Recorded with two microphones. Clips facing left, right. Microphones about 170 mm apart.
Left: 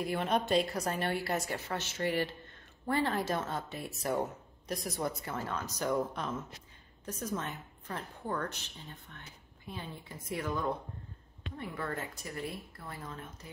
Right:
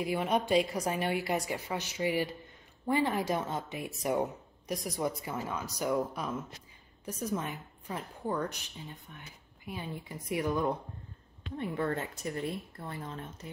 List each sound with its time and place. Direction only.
0.0 s a woman's voice: 10° right (ahead or behind); by 13.3 s 30° right (ahead or behind)